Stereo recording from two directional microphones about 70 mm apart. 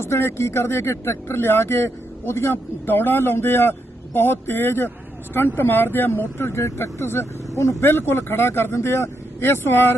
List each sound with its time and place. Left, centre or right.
0.0 s speech: left